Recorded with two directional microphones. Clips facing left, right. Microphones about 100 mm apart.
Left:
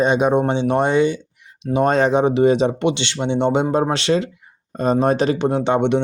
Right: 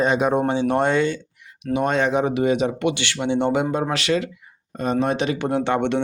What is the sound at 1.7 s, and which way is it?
Speech, 35° left (ahead or behind).